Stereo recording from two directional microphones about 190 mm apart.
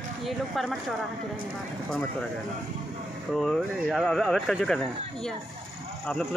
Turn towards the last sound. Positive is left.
turn(degrees=0)  # may be behind; listen again after turning